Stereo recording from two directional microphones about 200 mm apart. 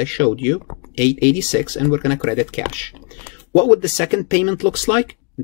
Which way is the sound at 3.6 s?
10° left (ahead or behind).